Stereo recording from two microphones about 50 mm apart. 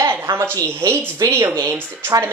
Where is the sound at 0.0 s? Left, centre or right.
Right.